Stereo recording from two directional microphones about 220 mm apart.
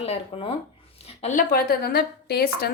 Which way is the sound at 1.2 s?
40° left (ahead or behind).